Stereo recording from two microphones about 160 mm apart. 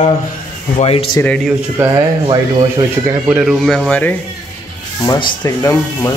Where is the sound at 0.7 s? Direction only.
35° left (ahead or behind).